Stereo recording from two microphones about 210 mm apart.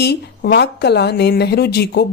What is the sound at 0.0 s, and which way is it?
Speech, 50° left (ahead or behind).